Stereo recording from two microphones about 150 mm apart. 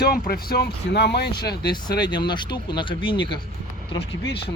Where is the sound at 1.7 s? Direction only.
30° left (ahead or behind).